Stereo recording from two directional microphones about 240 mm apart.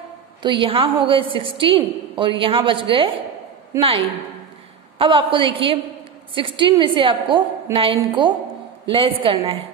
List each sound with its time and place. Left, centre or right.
0.4 s a woman's voice: centre